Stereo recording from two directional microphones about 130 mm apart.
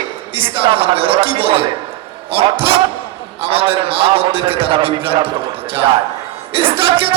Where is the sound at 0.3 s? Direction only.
45° right (ahead or behind).